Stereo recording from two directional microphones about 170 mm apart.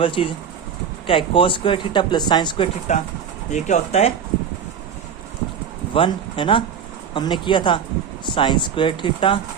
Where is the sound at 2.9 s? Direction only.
45° left (ahead or behind).